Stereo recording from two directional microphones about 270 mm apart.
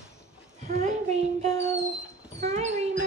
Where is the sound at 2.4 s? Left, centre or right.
Right.